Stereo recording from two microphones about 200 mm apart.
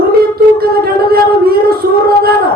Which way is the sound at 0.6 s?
50° right (ahead or behind).